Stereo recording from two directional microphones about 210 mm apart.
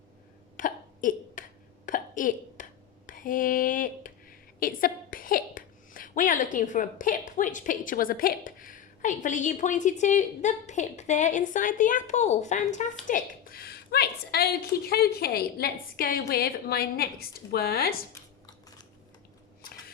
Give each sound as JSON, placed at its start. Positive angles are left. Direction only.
{"t": 0.5, "sound": "hiccup", "side_deg": 40}
{"t": 1.9, "sound": "a sound", "side_deg": 40}
{"t": 3.1, "sound": "a woman's voice", "side_deg": 40}